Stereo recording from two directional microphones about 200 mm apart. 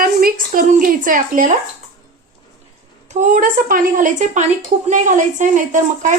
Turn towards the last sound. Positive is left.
turn(degrees=-40)  # may be behind; listen again after turning